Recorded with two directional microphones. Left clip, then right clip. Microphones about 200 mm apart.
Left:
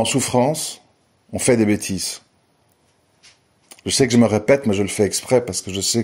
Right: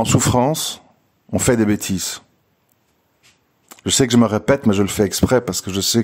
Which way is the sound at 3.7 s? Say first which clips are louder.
Right 1 dB; 25° right (ahead or behind).